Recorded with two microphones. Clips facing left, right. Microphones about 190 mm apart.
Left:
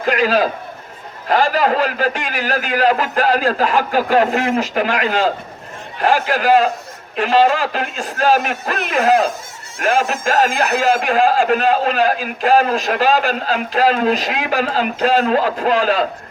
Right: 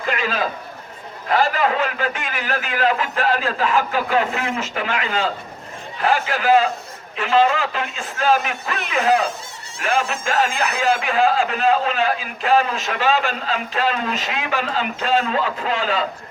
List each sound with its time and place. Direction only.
0.0 s a man's voice: 40° left (ahead or behind)
10.0 s speech: 50° left (ahead or behind)